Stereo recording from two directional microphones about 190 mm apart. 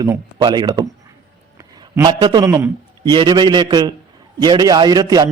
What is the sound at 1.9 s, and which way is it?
A man's voice, 20° right (ahead or behind).